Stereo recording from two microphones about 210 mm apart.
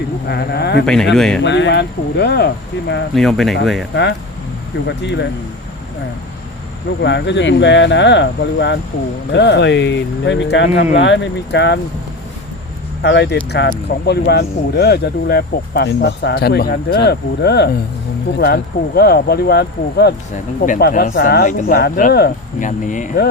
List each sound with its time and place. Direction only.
0.3 s speech: 50° left (ahead or behind)
1.1 s speech: centre (ahead or behind)
1.4 s speech: 60° left (ahead or behind)
3.2 s speech: centre (ahead or behind)
4.9 s speech: 55° left (ahead or behind)
7.0 s speech: 55° left (ahead or behind)
13.0 s speech: 55° left (ahead or behind); by 23.1 s 35° left (ahead or behind)